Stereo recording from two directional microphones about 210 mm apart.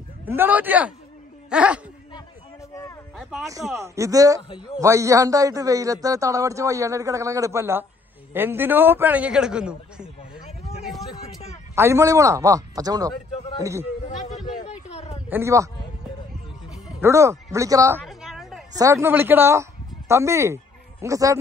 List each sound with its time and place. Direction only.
0.3 s a man's voice: 10° right (ahead or behind)
3.2 s a sound: centre (ahead or behind)
3.7 s a man's voice: 15° right (ahead or behind)
4.4 s a man's voice: 20° left (ahead or behind)
4.7 s a man's voice: 15° right (ahead or behind)
10.9 s a sound: centre (ahead or behind)
11.7 s a man's voice: 10° right (ahead or behind)
14.9 s a sound: 30° left (ahead or behind)
15.2 s speech: 10° right (ahead or behind)
17.0 s a man's voice: 15° right (ahead or behind)
18.0 s a sound: centre (ahead or behind)
18.8 s speech: 15° right (ahead or behind)